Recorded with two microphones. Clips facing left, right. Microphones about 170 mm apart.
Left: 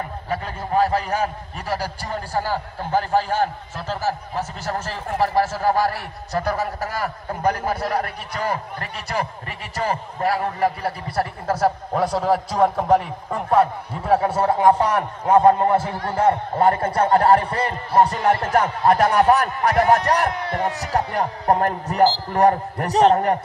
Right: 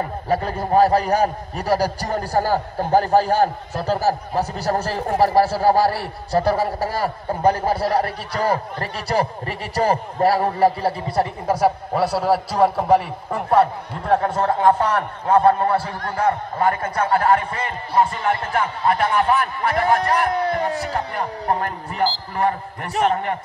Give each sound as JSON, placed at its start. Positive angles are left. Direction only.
{"t": 0.3, "sound": "a man's voice", "side_deg": -40}
{"t": 16.2, "sound": "a man's voice", "side_deg": 25}